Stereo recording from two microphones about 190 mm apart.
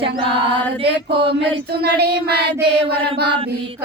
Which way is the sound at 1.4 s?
55° right (ahead or behind).